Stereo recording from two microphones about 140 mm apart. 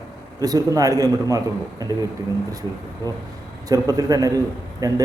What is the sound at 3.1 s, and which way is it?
Speech, 20° left (ahead or behind).